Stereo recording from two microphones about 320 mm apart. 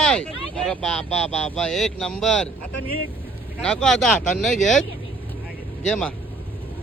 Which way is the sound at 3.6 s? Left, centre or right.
Centre.